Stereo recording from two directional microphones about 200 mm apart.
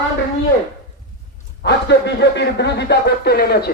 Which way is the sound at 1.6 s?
60° left (ahead or behind).